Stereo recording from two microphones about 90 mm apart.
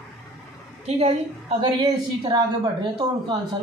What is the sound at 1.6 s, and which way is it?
Speech, 50° right (ahead or behind).